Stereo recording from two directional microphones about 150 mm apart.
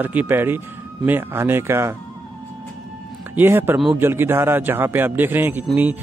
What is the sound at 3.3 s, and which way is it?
Speech, 15° right (ahead or behind).